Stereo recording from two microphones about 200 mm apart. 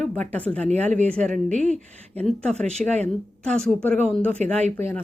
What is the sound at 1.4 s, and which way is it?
Speech, 40° right (ahead or behind).